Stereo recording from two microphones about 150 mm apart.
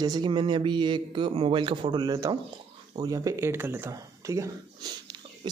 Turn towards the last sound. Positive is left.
turn(degrees=-25)  # may be behind; listen again after turning